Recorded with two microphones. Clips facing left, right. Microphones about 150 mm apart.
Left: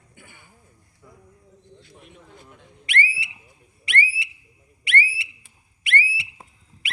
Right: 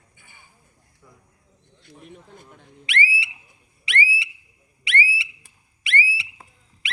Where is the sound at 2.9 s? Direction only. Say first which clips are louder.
Right 1 dB; 55° left (ahead or behind).